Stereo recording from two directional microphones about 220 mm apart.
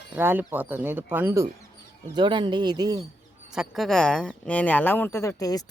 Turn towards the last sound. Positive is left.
turn(degrees=15)  # may be behind; listen again after turning